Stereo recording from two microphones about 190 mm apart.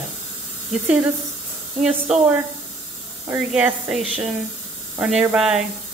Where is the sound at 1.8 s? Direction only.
Centre (ahead or behind).